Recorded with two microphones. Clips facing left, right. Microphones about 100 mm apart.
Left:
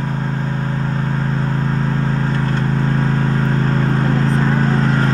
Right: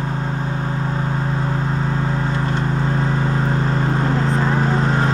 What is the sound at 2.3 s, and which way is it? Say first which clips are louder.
Vehicle: left 2 dB; 15° right (ahead or behind).